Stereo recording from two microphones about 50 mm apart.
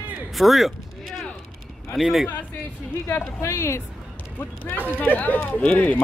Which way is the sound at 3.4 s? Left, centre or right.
Left.